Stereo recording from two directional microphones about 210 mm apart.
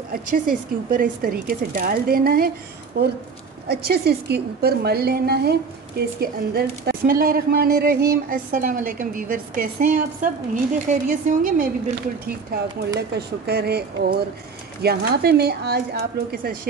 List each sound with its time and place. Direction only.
0.1 s speech: 40° right (ahead or behind)
13.1 s speech: 50° right (ahead or behind)